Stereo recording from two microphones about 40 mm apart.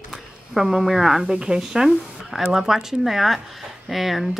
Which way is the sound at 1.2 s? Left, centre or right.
Centre.